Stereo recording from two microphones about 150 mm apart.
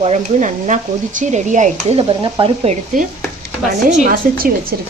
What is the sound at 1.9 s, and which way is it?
Speech, 35° right (ahead or behind).